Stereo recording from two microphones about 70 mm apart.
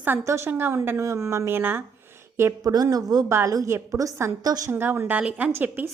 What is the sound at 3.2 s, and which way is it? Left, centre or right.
Speech, right.